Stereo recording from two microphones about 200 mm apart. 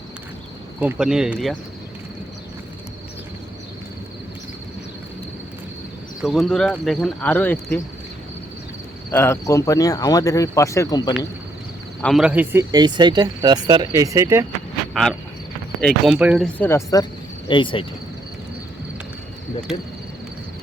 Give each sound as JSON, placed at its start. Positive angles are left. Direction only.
{"t": 0.8, "sound": "speech", "side_deg": -5}
{"t": 6.2, "sound": "speech", "side_deg": 0}
{"t": 9.1, "sound": "speech", "side_deg": 15}
{"t": 12.0, "sound": "speech", "side_deg": -5}
{"t": 15.8, "sound": "speech", "side_deg": 0}
{"t": 16.6, "sound": "speech", "side_deg": 15}